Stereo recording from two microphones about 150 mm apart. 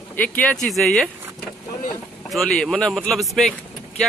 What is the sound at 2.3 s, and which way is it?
Speech, centre (ahead or behind).